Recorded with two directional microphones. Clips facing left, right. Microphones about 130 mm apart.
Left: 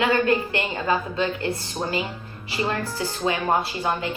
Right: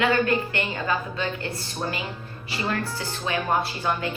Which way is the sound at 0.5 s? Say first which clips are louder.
Left 3 dB; 25° left (ahead or behind).